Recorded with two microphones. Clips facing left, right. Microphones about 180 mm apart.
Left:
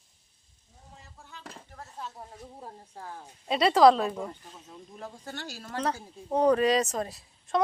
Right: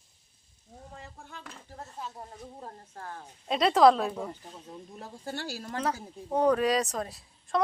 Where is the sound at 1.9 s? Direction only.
Centre (ahead or behind).